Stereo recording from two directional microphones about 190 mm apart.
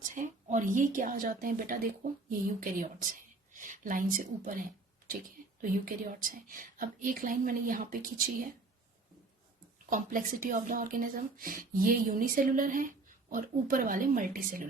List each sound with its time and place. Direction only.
0.1 s a woman's voice: 40° right (ahead or behind)
9.9 s speech: 45° right (ahead or behind)